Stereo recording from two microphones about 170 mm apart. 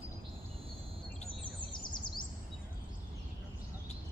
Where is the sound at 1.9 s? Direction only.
25° left (ahead or behind).